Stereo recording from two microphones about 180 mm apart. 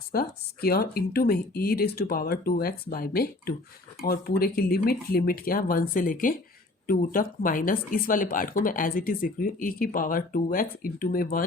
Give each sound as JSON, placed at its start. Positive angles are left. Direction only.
{"t": 0.1, "sound": "speech", "side_deg": 55}